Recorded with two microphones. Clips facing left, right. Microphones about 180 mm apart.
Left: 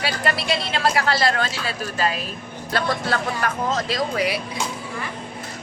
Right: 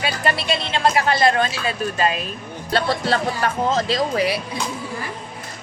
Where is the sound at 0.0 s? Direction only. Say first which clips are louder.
Right 1 dB; 25° right (ahead or behind).